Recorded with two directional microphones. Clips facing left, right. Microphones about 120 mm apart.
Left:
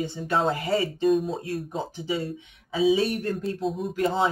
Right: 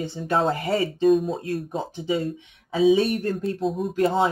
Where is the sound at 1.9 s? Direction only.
25° right (ahead or behind).